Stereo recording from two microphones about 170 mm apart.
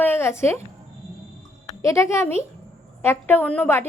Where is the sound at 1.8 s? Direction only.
15° left (ahead or behind).